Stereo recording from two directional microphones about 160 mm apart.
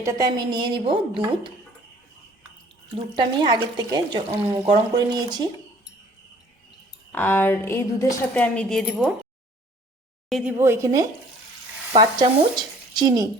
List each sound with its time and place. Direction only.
0.0 s speech: 25° right (ahead or behind)
2.9 s speech: 25° right (ahead or behind)
7.1 s a woman's voice: 10° left (ahead or behind)
10.2 s a woman's voice: centre (ahead or behind)
10.6 s speech: 20° right (ahead or behind)
11.9 s speech: 30° right (ahead or behind)